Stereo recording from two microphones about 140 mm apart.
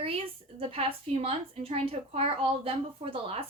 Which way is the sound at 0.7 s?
40° right (ahead or behind).